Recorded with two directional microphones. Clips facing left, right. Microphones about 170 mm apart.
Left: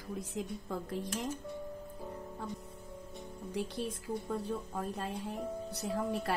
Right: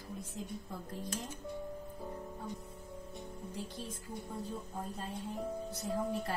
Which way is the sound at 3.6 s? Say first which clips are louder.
Left 8 dB; 75° left (ahead or behind).